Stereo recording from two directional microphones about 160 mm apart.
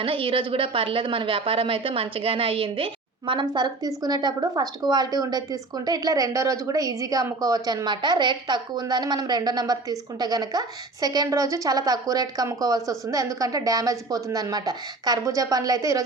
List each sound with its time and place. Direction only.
0.0 s a woman's voice: 35° right (ahead or behind)